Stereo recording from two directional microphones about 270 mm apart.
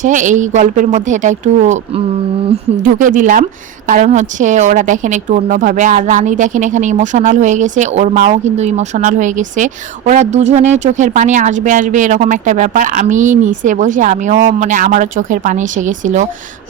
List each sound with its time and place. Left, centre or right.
0.0 s a woman's voice: right
2.8 s a woman's voice: right